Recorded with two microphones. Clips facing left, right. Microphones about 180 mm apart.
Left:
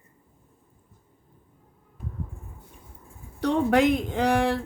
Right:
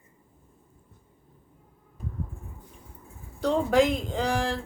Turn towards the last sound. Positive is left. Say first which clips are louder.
# left 5 dB
turn(degrees=65)  # may be behind; listen again after turning